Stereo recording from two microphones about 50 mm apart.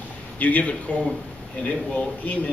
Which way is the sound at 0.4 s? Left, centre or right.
Left.